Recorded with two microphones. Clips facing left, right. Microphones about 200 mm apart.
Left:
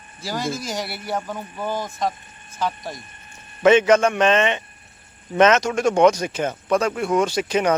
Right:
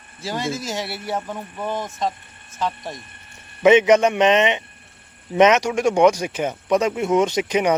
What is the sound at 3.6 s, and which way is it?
Speech, 15° right (ahead or behind).